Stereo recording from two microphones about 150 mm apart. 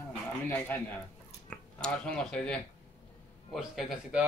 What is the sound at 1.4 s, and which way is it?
Speech, 5° left (ahead or behind).